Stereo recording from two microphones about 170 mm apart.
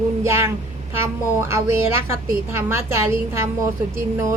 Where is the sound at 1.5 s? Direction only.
15° right (ahead or behind).